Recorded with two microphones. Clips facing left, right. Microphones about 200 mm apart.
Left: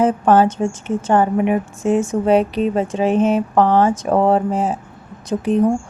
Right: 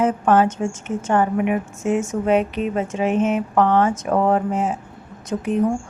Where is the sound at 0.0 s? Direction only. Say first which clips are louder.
Left 3 dB; 35° left (ahead or behind).